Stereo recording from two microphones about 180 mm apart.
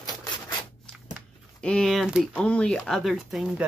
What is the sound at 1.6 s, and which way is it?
Speech, 5° left (ahead or behind).